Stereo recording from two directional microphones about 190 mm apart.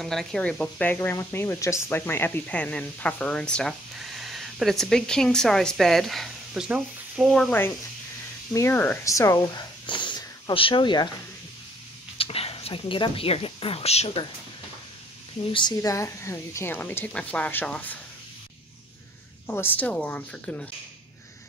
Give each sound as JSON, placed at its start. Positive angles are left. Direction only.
{"t": 0.0, "sound": "speech", "side_deg": 0}
{"t": 12.2, "sound": "a woman's voice", "side_deg": 30}
{"t": 15.5, "sound": "a woman's voice", "side_deg": 20}
{"t": 19.4, "sound": "a woman's voice", "side_deg": 10}